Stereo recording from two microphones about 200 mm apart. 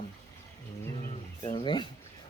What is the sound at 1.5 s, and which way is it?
Speech, 25° left (ahead or behind).